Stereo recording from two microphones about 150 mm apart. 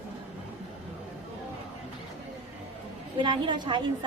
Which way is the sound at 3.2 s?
30° right (ahead or behind).